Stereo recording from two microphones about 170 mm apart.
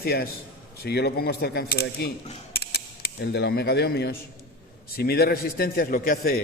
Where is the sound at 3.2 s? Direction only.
80° left.